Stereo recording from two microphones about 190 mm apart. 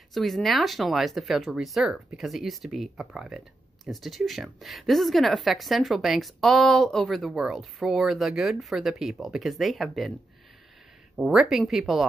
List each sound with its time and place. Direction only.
0.1 s speech: centre (ahead or behind)
11.1 s speech: 5° right (ahead or behind)